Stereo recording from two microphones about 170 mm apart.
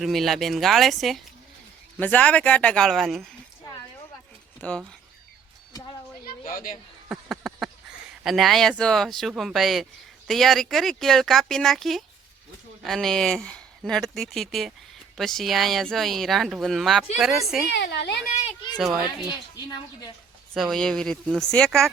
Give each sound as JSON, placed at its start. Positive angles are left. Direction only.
{"t": 0.0, "sound": "speech", "side_deg": 0}
{"t": 4.6, "sound": "speech", "side_deg": 10}
{"t": 6.2, "sound": "a sound", "side_deg": 55}
{"t": 7.1, "sound": "a sound", "side_deg": 0}
{"t": 8.2, "sound": "speech", "side_deg": 0}
{"t": 17.7, "sound": "a woman's voice", "side_deg": 85}
{"t": 18.4, "sound": "speech", "side_deg": 25}
{"t": 18.8, "sound": "speech", "side_deg": 0}
{"t": 19.5, "sound": "a woman's voice", "side_deg": 25}
{"t": 20.5, "sound": "speech", "side_deg": 0}